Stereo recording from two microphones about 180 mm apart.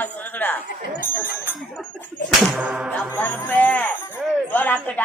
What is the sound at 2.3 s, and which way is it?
Music, 5° right (ahead or behind).